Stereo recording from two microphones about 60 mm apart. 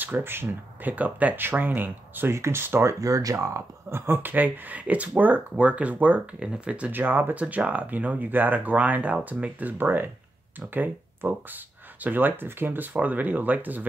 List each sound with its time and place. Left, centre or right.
0.0 s speech: right
2.3 s speech: right
3.0 s speech: right
6.4 s speech: centre
6.9 s speech: right